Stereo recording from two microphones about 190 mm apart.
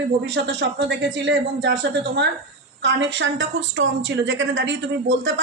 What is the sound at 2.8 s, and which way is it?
A woman's voice, 70° right (ahead or behind).